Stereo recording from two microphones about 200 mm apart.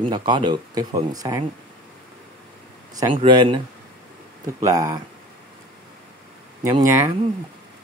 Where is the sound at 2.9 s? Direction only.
20° right (ahead or behind).